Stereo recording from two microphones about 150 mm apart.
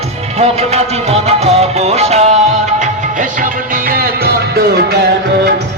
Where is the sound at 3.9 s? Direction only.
80° right.